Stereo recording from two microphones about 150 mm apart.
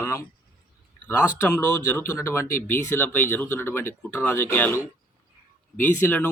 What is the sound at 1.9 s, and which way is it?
Speech, 15° left (ahead or behind).